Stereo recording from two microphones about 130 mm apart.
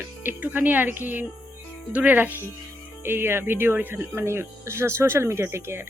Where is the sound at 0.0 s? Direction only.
15° right (ahead or behind).